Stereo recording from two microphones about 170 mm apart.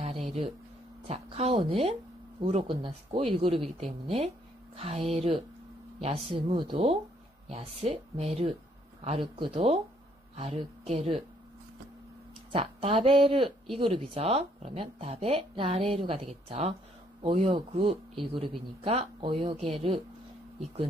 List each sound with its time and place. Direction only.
0.0 s a sound: 35° right (ahead or behind)
1.0 s speech: 35° right (ahead or behind)
4.7 s speech: 35° right (ahead or behind)
12.5 s speech: 35° right (ahead or behind)